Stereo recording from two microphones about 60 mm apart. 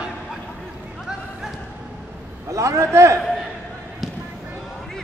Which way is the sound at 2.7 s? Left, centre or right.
Right.